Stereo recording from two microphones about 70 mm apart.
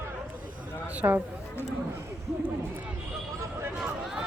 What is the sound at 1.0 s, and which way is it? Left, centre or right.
Speech, right.